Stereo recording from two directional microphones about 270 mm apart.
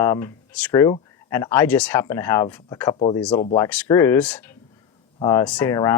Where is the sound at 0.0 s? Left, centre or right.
Centre.